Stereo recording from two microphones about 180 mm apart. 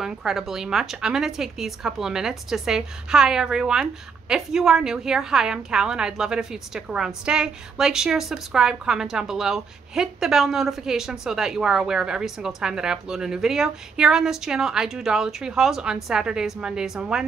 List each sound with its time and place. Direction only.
0.0 s a woman's voice: centre (ahead or behind)